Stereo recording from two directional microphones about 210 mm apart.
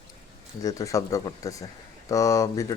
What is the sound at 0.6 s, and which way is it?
Speech, 15° left (ahead or behind).